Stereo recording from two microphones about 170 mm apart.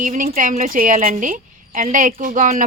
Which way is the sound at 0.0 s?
50° right (ahead or behind).